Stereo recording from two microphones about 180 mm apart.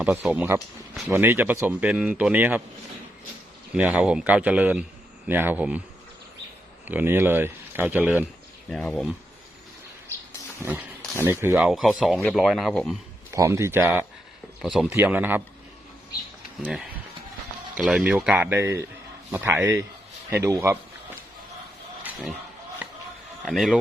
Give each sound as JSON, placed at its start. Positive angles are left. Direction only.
{"t": 0.0, "sound": "speech", "side_deg": -10}
{"t": 3.8, "sound": "speech", "side_deg": -5}
{"t": 6.8, "sound": "speech", "side_deg": -10}
{"t": 8.7, "sound": "speech", "side_deg": 5}
{"t": 10.6, "sound": "speech", "side_deg": -10}
{"t": 13.3, "sound": "speech", "side_deg": -15}
{"t": 14.6, "sound": "speech", "side_deg": 0}
{"t": 14.9, "sound": "speech", "side_deg": -10}
{"t": 16.6, "sound": "speech", "side_deg": 0}
{"t": 22.8, "sound": "a sound", "side_deg": -10}
{"t": 23.5, "sound": "speech", "side_deg": 0}